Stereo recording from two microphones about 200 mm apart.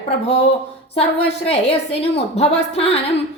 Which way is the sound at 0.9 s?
30° left (ahead or behind).